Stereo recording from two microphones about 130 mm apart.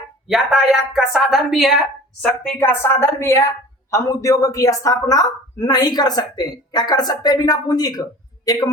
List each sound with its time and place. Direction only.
0.3 s a woman's voice: 5° right (ahead or behind)
2.2 s a woman's voice: 10° left (ahead or behind); by 8.7 s 30° left (ahead or behind)